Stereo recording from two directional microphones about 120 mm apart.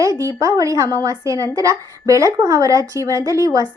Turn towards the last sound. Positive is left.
turn(degrees=-30)  # may be behind; listen again after turning